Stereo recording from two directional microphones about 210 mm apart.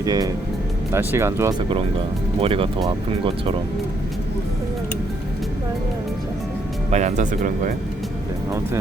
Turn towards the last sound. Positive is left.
turn(degrees=-40)  # may be behind; listen again after turning